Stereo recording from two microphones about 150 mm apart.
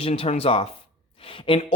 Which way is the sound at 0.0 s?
40° left (ahead or behind).